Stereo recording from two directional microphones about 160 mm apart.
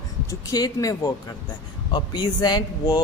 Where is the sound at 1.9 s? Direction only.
25° left (ahead or behind).